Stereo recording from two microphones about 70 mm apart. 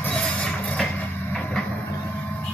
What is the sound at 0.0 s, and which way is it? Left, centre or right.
Music, centre.